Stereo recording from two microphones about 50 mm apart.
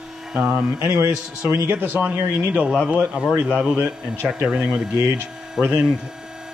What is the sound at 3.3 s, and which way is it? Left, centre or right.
Speech, right.